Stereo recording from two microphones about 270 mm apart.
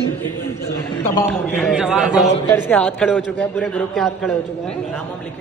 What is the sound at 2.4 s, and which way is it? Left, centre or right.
A man's voice, centre.